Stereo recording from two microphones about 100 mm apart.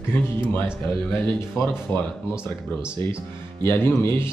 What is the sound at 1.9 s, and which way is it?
Speech, 20° left (ahead or behind).